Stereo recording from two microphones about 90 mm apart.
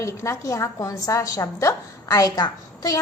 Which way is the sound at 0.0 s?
35° left (ahead or behind).